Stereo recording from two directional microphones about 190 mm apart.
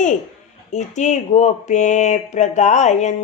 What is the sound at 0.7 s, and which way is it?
Speech, 40° left (ahead or behind).